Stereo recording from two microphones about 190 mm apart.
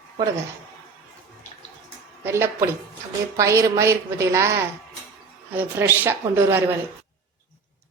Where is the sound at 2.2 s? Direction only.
15° right (ahead or behind).